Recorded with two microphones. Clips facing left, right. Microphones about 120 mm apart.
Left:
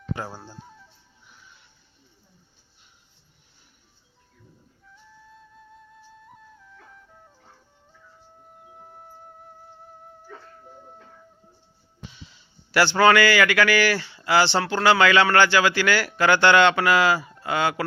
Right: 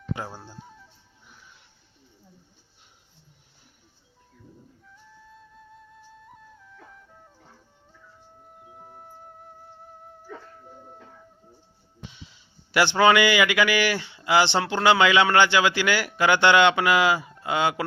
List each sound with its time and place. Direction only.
0.3 s speech: 10° left (ahead or behind)
4.9 s flute: centre (ahead or behind)
8.4 s music: centre (ahead or behind)
10.6 s dog: centre (ahead or behind)
12.7 s a man's voice: 15° right (ahead or behind)